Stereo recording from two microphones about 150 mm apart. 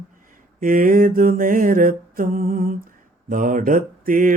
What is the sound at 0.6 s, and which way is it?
Mantra, 65° right (ahead or behind).